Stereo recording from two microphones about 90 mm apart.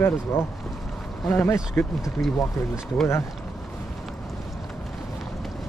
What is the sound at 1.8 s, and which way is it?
Speech, 20° left (ahead or behind).